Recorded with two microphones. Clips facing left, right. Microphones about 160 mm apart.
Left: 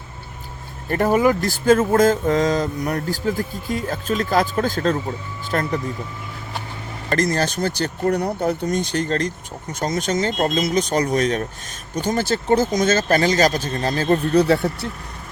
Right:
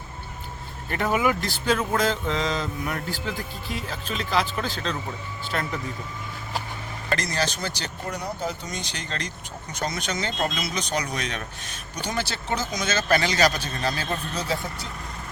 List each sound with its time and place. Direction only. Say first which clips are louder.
0.9 s speech: left 7 dB; 45° left (ahead or behind)
7.1 s speech: left 7 dB; 50° left (ahead or behind); by 14.8 s 65° left (ahead or behind)